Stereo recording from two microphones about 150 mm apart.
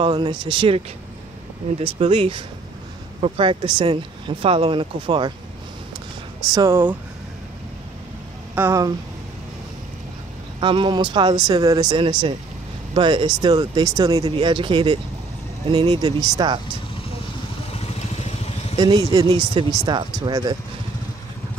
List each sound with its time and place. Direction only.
0.0 s speech: 35° right (ahead or behind)
6.5 s speech: 20° right (ahead or behind)
8.5 s speech: 20° right (ahead or behind)
10.6 s speech: 35° right (ahead or behind)
17.7 s vehicle: 45° left (ahead or behind)
18.8 s speech: 25° right (ahead or behind)